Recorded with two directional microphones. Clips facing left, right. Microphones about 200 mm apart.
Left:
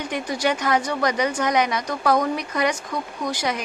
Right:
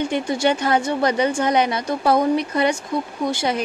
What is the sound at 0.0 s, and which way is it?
A woman's voice, 25° right (ahead or behind).